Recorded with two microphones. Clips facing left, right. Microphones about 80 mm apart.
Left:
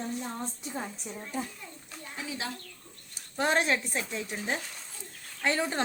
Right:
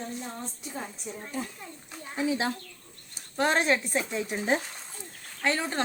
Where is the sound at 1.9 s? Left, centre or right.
Right.